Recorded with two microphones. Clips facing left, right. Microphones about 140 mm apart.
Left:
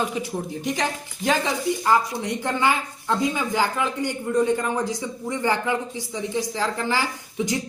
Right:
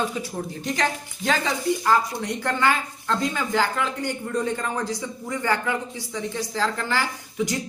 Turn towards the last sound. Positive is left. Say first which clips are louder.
# left 1 dB
turn(degrees=15)  # may be behind; listen again after turning